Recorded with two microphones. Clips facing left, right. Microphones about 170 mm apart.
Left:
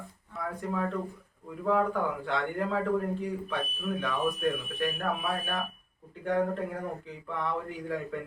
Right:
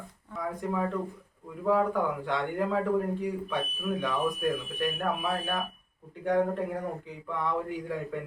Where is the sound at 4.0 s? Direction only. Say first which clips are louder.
Even; 10° right (ahead or behind).